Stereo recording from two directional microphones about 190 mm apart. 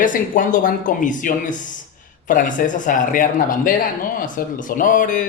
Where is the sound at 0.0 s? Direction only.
45° left (ahead or behind).